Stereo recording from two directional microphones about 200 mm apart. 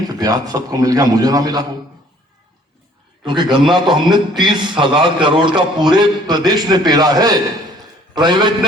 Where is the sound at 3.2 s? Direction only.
20° right (ahead or behind).